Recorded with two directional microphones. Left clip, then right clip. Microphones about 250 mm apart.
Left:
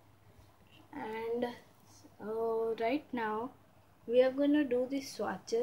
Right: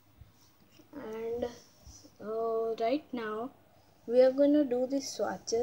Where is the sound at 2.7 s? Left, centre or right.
Centre.